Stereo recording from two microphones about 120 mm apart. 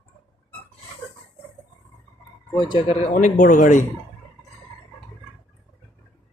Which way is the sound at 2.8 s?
80° left.